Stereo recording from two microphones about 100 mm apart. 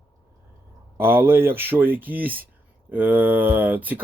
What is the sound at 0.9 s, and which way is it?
Speech, 20° right (ahead or behind).